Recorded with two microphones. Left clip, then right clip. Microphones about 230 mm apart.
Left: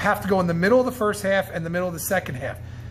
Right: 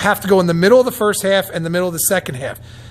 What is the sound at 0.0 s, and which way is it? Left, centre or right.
A man's voice, right.